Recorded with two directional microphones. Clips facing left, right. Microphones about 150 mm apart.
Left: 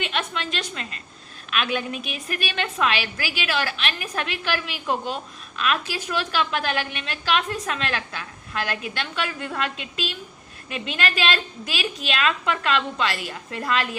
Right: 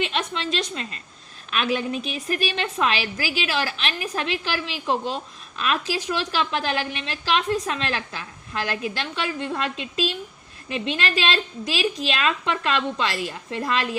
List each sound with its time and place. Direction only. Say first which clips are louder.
0.0 s a woman's voice: right 2 dB; 35° right (ahead or behind)